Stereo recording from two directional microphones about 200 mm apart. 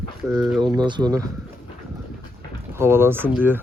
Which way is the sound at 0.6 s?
20° right (ahead or behind).